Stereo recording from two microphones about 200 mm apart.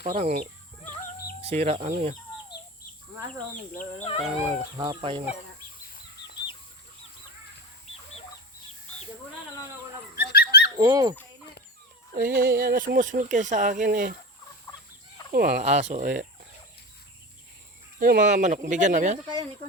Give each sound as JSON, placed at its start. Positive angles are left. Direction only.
{"t": 0.0, "sound": "speech", "side_deg": -35}
{"t": 1.5, "sound": "speech", "side_deg": -30}
{"t": 3.8, "sound": "speech", "side_deg": 35}
{"t": 4.8, "sound": "speech", "side_deg": -25}
{"t": 10.2, "sound": "dog", "side_deg": 55}
{"t": 10.8, "sound": "speech", "side_deg": -15}
{"t": 12.1, "sound": "speech", "side_deg": -50}
{"t": 15.3, "sound": "speech", "side_deg": -50}
{"t": 15.6, "sound": "speech", "side_deg": -35}
{"t": 18.0, "sound": "speech", "side_deg": -40}